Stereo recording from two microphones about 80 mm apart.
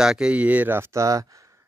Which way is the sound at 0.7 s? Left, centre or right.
Right.